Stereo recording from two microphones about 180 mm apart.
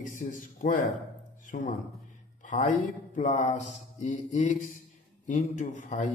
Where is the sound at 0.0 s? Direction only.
45° left (ahead or behind).